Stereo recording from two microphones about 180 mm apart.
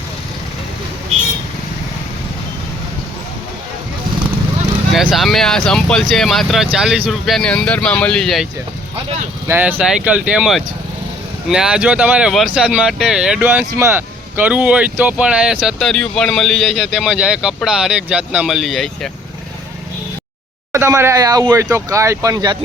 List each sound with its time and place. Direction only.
4.9 s speech: centre (ahead or behind)
9.5 s speech: 10° right (ahead or behind)
20.7 s speech: 15° right (ahead or behind)